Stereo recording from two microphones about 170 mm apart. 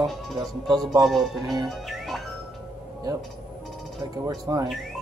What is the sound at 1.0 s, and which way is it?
Music, centre (ahead or behind).